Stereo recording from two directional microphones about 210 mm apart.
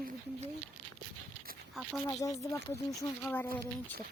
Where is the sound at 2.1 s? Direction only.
15° left (ahead or behind).